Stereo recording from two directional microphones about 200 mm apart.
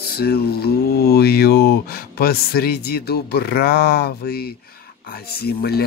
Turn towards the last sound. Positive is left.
turn(degrees=50)  # may be behind; listen again after turning